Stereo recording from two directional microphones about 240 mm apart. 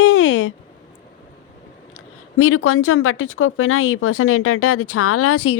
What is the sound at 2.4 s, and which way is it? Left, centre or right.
Speech, left.